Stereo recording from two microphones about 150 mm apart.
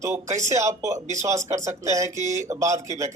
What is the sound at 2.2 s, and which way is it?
Speech, 50° right (ahead or behind).